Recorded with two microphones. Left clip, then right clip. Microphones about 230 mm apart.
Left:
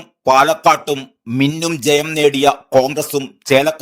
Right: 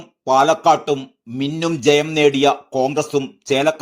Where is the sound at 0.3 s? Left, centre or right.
Left.